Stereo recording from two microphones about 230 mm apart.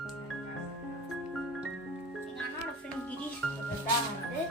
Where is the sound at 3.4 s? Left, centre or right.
Centre.